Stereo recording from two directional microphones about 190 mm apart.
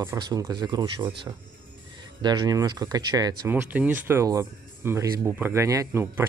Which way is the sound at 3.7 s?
10° right (ahead or behind).